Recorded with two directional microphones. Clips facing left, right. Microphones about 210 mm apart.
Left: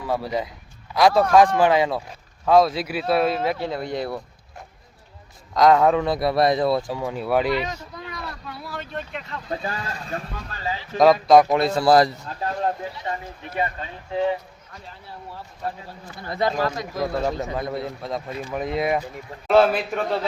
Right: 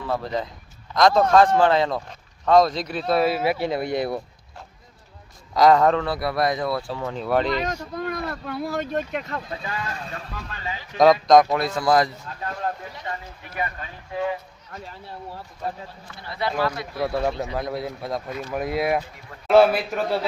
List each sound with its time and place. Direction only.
0.1 s speech: 10° left (ahead or behind); by 4.2 s 15° right (ahead or behind)
5.5 s speech: centre (ahead or behind)
7.6 s a sound: 50° right (ahead or behind)
9.5 s speech: 35° left (ahead or behind)
10.9 s speech: centre (ahead or behind)
11.4 s speech: 25° left (ahead or behind)
16.2 s speech: 45° left (ahead or behind)
17.0 s a man's voice: 5° right (ahead or behind)